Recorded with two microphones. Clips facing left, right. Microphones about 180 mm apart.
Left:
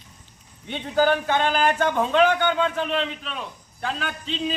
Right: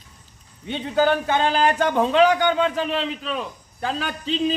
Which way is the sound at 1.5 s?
30° right (ahead or behind).